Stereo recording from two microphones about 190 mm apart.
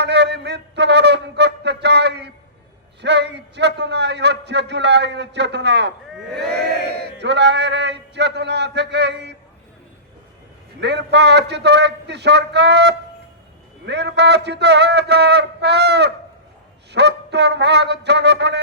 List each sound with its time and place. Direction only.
0.0 s a sound: 60° right (ahead or behind)
3.0 s a man's voice: 65° right (ahead or behind)
10.8 s a man's voice: 65° right (ahead or behind)